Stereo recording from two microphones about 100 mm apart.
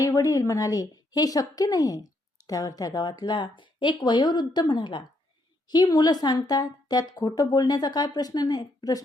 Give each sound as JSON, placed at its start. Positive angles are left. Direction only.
{"t": 0.0, "sound": "a woman's voice", "side_deg": 35}